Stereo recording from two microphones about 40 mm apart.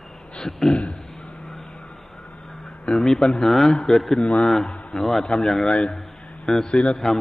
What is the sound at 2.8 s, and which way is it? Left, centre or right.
A man's voice, centre.